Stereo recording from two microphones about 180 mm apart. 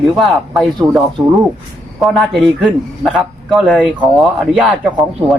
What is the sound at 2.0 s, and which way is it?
Speech, centre (ahead or behind).